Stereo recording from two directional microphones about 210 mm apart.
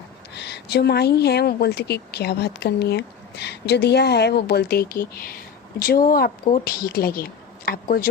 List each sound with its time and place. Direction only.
0.3 s speech: 55° left (ahead or behind)